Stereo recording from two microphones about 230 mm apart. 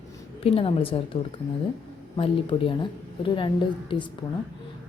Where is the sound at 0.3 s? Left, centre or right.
Left.